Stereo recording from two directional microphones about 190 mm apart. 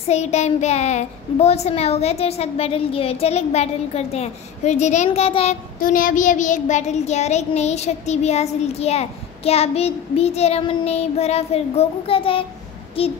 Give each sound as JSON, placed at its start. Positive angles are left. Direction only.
{"t": 0.0, "sound": "child singing", "side_deg": 35}
{"t": 5.8, "sound": "child singing", "side_deg": 45}